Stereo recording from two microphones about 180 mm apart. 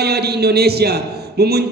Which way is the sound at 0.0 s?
65° right (ahead or behind).